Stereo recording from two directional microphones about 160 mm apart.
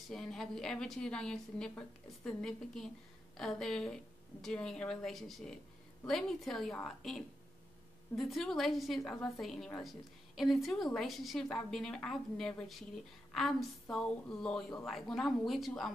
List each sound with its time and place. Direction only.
0.1 s a woman's voice: 5° left (ahead or behind)